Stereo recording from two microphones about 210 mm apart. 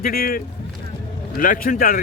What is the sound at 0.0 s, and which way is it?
Speech, 45° left (ahead or behind).